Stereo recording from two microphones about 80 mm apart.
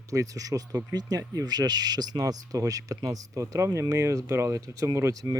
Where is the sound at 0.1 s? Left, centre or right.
Right.